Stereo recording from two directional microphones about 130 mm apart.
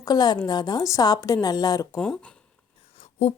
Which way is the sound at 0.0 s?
30° left (ahead or behind).